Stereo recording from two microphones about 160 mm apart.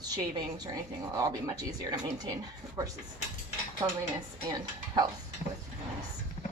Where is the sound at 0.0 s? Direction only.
25° right (ahead or behind).